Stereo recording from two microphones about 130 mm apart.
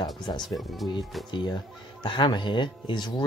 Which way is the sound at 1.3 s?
35° left (ahead or behind).